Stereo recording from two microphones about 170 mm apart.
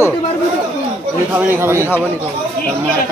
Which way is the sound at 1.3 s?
10° right (ahead or behind).